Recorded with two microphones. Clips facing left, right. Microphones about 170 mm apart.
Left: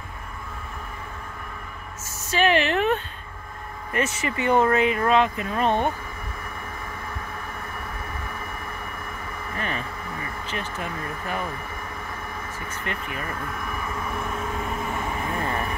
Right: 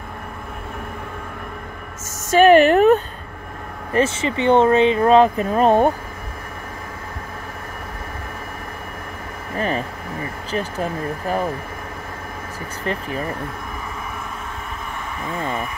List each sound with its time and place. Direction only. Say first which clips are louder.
2.3 s speech: right 10 dB; 50° right (ahead or behind)
3.9 s speech: right 7 dB; 30° right (ahead or behind)
9.6 s speech: right 9 dB; 35° right (ahead or behind)
12.8 s speech: right 8 dB; 35° right (ahead or behind)